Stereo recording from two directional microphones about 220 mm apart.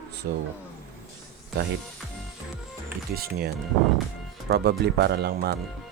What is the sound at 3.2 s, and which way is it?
Speech, 45° right (ahead or behind).